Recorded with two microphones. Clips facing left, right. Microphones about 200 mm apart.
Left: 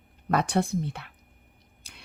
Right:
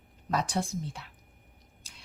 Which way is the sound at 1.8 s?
60° left (ahead or behind).